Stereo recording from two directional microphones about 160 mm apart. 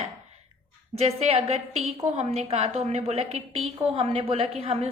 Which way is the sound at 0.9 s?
40° right (ahead or behind).